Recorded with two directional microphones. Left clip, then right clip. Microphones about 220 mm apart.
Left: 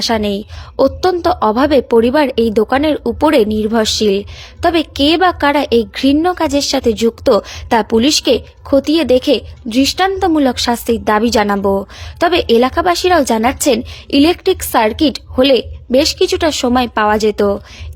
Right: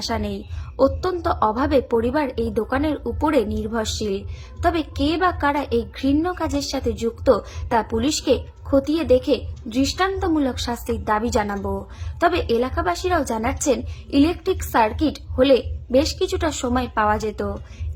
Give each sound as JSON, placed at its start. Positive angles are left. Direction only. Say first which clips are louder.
{"t": 0.1, "sound": "a woman's voice", "louder": "left 11 dB", "side_deg": 35}